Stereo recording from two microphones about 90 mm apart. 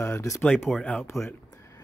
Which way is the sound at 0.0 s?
30° left (ahead or behind).